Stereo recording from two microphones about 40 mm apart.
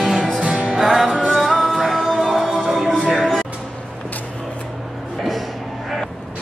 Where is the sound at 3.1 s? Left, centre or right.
Centre.